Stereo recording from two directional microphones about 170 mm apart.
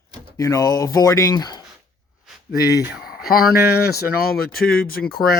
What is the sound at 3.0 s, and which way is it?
Speech, 60° left (ahead or behind).